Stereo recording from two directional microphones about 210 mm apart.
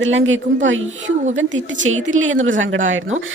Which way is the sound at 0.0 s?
65° right (ahead or behind).